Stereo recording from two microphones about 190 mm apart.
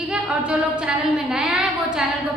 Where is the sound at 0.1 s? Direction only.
5° right (ahead or behind).